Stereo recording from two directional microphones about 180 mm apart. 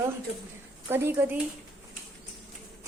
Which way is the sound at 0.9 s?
15° right (ahead or behind).